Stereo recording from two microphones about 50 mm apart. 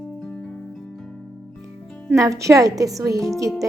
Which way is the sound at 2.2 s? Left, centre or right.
Right.